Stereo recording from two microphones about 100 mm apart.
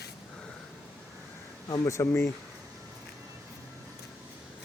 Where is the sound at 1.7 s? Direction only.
30° left (ahead or behind).